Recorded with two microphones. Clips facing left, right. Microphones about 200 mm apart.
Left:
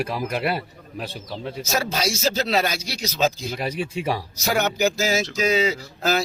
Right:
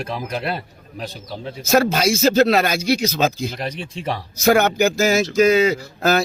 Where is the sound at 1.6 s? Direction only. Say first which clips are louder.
Right 9 dB; 55° right (ahead or behind).